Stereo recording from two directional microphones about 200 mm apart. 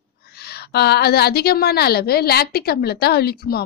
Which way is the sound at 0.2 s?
50° left (ahead or behind).